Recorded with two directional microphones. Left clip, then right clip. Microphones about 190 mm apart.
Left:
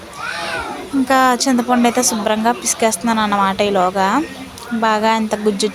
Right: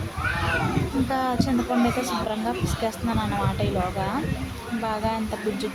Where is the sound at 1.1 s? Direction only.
30° left (ahead or behind).